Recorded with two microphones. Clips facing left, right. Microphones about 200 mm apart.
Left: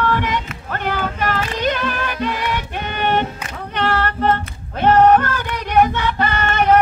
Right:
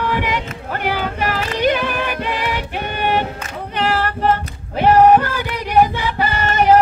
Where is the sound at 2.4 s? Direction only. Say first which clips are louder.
Right 1 dB; 10° right (ahead or behind).